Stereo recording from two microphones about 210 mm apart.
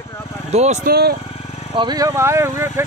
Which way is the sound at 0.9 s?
50° right (ahead or behind).